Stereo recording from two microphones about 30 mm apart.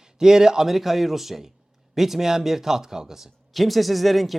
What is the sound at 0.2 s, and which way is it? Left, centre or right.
Speech, centre.